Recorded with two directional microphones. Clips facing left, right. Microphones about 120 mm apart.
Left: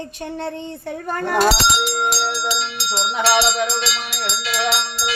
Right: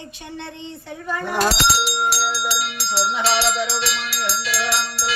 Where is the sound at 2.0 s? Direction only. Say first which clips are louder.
Left 1 dB; 20° left (ahead or behind).